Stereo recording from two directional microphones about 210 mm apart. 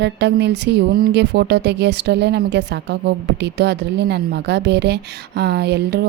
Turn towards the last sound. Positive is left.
turn(degrees=-55)  # may be behind; listen again after turning